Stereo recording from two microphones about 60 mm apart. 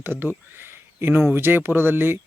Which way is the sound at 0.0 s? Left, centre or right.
Right.